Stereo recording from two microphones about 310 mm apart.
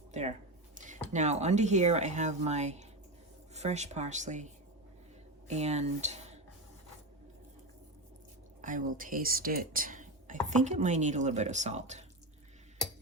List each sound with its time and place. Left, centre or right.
0.1 s speech: right
5.5 s speech: right
8.6 s speech: right